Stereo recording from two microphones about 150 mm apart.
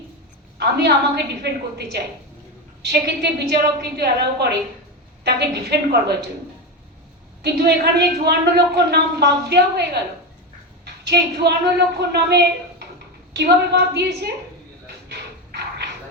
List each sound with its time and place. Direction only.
0.6 s a woman's voice: 90° right
7.4 s a woman's voice: 90° right
11.1 s a woman's voice: 90° right